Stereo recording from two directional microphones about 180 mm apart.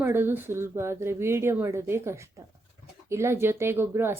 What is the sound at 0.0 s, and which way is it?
Speech, 10° right (ahead or behind).